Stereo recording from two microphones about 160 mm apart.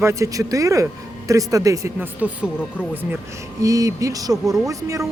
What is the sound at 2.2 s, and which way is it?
Speech, 10° right (ahead or behind).